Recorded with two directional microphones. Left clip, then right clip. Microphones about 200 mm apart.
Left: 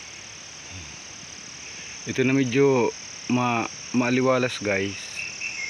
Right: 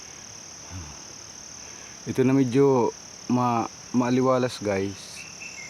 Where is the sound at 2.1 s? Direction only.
15° right (ahead or behind).